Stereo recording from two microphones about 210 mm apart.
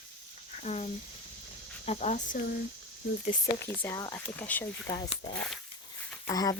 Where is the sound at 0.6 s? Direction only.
30° left (ahead or behind).